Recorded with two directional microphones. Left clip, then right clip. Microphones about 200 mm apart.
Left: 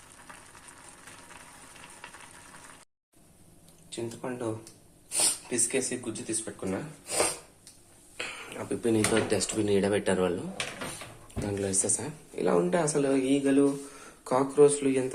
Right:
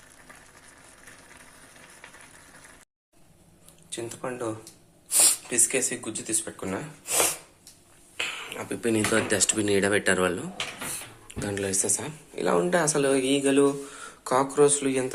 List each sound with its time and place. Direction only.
3.8 s speech: centre (ahead or behind)
8.4 s speech: 5° left (ahead or behind)
11.3 s speech: centre (ahead or behind)